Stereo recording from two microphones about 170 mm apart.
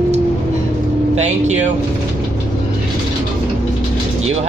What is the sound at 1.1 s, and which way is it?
Speech, 40° right (ahead or behind).